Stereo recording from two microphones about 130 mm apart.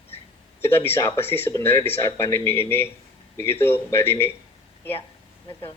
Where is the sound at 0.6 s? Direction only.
20° left (ahead or behind).